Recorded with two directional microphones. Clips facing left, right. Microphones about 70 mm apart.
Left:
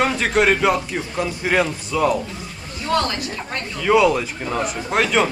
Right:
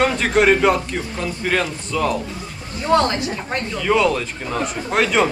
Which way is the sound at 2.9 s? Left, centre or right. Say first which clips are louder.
Right 4 dB; right.